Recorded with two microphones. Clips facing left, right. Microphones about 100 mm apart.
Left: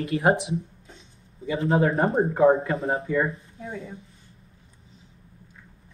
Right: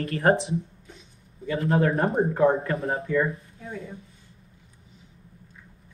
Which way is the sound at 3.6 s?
30° left (ahead or behind).